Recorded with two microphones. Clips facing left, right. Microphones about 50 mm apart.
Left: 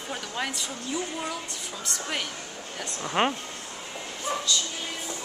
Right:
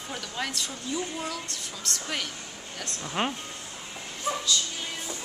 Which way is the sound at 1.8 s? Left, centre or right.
Centre.